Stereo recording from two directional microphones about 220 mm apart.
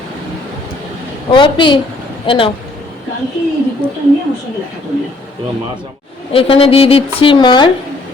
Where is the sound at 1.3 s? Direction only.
20° left (ahead or behind).